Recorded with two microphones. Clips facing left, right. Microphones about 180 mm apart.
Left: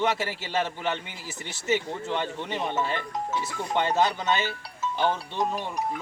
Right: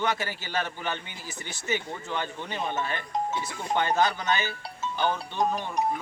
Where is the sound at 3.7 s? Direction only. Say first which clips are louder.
Even; 25° left (ahead or behind).